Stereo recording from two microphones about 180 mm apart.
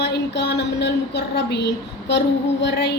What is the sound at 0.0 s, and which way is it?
A woman's voice, 65° left (ahead or behind).